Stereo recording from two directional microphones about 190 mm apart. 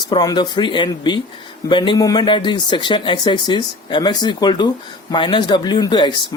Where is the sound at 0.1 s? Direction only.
20° left (ahead or behind).